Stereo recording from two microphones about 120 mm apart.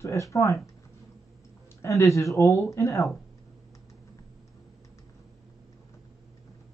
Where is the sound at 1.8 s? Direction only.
25° left (ahead or behind).